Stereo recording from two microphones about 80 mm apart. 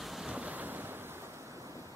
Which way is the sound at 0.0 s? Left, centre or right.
Centre.